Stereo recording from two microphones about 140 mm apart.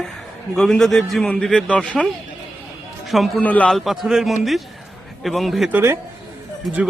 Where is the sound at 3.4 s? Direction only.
10° left (ahead or behind).